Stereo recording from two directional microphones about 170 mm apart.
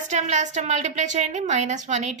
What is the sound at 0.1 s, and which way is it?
A woman's voice, 45° right (ahead or behind).